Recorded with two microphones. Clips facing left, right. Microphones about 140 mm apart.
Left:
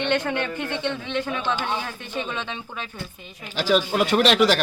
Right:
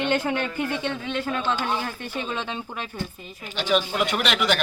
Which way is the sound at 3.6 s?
40° left (ahead or behind).